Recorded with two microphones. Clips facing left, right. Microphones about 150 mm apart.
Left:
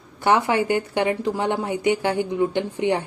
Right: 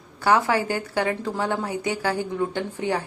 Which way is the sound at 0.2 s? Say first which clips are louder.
Left 1 dB; 20° left (ahead or behind).